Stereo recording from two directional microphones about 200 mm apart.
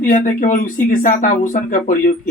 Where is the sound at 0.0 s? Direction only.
40° left (ahead or behind).